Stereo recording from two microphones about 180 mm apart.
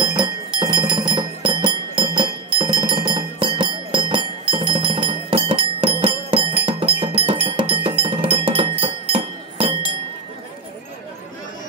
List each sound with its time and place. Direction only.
0.6 s music: 25° right (ahead or behind)
7.4 s cowbell: 30° right (ahead or behind)
8.5 s music: 30° right (ahead or behind)